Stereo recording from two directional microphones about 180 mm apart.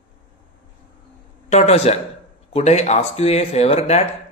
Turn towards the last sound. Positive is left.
turn(degrees=35)  # may be behind; listen again after turning